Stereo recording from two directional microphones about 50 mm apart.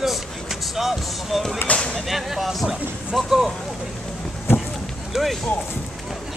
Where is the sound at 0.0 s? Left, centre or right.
Centre.